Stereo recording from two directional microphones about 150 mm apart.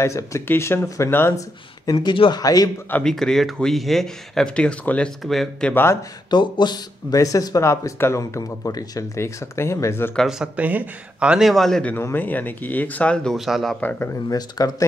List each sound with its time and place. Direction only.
0.0 s speech: 20° left (ahead or behind)
1.9 s speech: 30° left (ahead or behind)
2.9 s a man's voice: 5° left (ahead or behind)
6.3 s speech: 30° left (ahead or behind)
10.1 s a man's voice: 5° right (ahead or behind)
13.7 s speech: 10° left (ahead or behind)
14.3 s speech: 25° left (ahead or behind)